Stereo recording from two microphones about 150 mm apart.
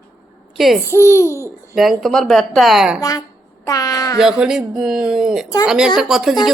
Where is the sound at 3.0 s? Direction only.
25° left (ahead or behind).